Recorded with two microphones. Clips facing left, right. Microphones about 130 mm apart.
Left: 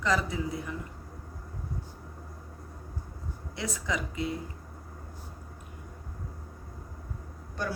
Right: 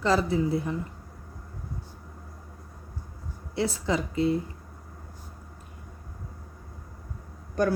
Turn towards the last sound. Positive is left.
turn(degrees=-50)  # may be behind; listen again after turning